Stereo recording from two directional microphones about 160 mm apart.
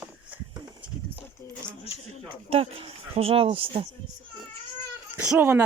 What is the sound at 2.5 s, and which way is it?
Speech, 40° right (ahead or behind).